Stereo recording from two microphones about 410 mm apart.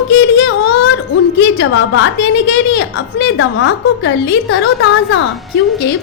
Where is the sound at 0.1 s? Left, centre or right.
Left.